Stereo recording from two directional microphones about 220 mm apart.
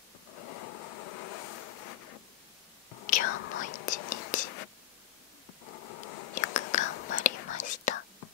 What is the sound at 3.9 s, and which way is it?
Whispering, 35° left (ahead or behind).